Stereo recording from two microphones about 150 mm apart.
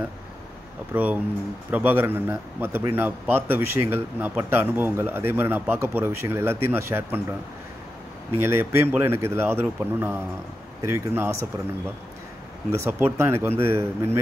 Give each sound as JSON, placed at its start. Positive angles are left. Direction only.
{"t": 0.9, "sound": "a man's voice", "side_deg": -10}
{"t": 8.5, "sound": "a man's voice", "side_deg": -15}
{"t": 12.7, "sound": "a man's voice", "side_deg": -20}